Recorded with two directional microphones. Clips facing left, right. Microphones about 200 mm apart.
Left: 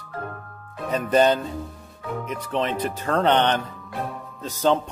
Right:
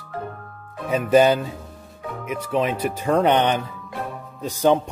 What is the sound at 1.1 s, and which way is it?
Speech, 5° right (ahead or behind).